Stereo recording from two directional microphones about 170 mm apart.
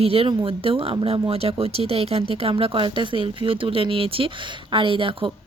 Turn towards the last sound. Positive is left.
turn(degrees=-30)  # may be behind; listen again after turning